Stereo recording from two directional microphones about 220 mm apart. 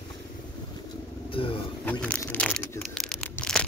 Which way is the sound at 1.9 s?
5° left (ahead or behind).